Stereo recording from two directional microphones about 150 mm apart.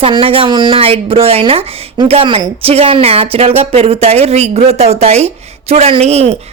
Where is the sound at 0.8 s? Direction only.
40° right (ahead or behind).